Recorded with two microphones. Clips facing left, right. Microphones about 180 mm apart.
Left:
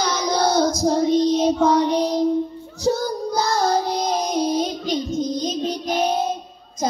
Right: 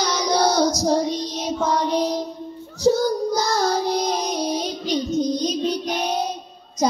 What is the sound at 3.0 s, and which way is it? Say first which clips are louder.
Child singing: right 1 dB; 55° left (ahead or behind).